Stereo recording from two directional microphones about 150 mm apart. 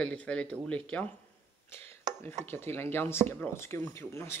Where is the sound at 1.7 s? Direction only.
15° left (ahead or behind).